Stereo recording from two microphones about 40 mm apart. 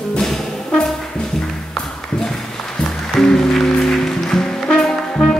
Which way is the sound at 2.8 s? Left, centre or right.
Centre.